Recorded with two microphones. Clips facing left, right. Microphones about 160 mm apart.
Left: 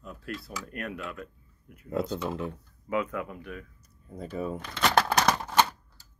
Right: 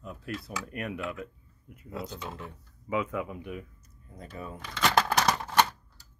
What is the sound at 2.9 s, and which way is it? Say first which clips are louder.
Speech: left 1 dB; 10° right (ahead or behind).